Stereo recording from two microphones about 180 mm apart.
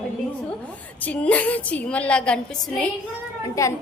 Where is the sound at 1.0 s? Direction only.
10° left (ahead or behind).